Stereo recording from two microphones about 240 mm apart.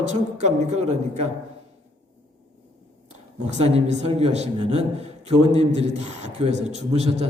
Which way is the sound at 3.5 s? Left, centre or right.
Right.